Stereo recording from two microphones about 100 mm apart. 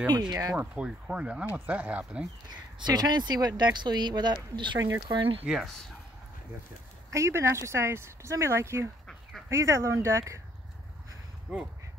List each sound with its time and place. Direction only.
0.3 s speech: 35° right (ahead or behind)
0.6 s speech: 10° right (ahead or behind)
2.5 s speech: 45° right (ahead or behind)
5.1 s speech: 65° right (ahead or behind)
5.5 s speech: centre (ahead or behind)
7.1 s speech: 30° right (ahead or behind)
11.5 s speech: 10° right (ahead or behind)